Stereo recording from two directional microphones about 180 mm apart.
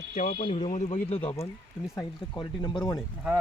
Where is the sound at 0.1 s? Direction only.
50° left (ahead or behind).